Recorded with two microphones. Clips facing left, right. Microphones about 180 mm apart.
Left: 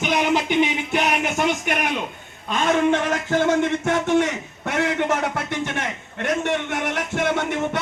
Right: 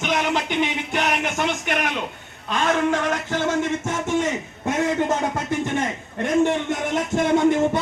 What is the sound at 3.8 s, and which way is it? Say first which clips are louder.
Speech: left 4 dB; 65° left (ahead or behind).